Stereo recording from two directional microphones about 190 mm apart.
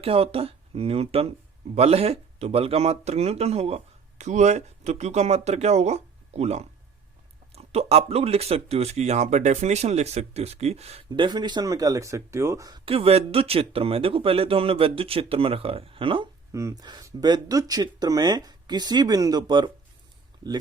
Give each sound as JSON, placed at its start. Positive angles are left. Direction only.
{"t": 0.0, "sound": "speech", "side_deg": -30}